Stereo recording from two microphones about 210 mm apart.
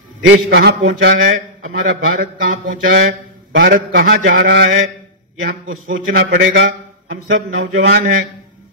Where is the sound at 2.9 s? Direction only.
45° right (ahead or behind).